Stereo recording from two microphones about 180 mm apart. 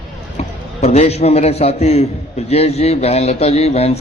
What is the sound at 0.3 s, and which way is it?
A man's voice, 35° left (ahead or behind).